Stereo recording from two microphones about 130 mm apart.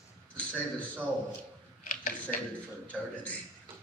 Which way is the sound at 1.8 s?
85° left.